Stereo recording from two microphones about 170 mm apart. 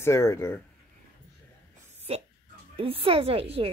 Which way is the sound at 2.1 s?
35° right (ahead or behind).